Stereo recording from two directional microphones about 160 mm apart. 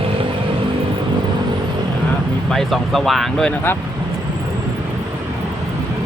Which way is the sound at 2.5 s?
Centre (ahead or behind).